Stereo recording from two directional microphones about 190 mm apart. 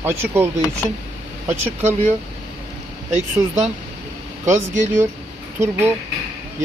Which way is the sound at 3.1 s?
35° right (ahead or behind).